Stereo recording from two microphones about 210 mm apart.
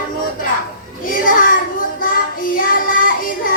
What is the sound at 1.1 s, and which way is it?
Child singing, 40° left (ahead or behind).